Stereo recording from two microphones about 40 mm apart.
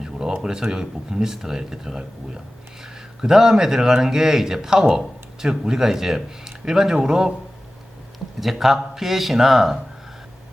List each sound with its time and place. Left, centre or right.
0.0 s a sound: centre
0.4 s speech: centre
8.4 s speech: centre